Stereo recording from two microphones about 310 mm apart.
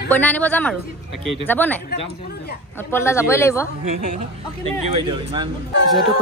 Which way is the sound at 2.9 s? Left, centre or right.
Centre.